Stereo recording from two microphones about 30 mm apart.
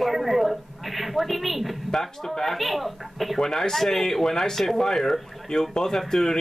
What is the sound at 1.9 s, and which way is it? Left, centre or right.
A man's voice, centre.